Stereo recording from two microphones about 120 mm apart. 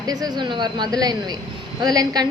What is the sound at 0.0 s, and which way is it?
A woman's voice, 35° right (ahead or behind).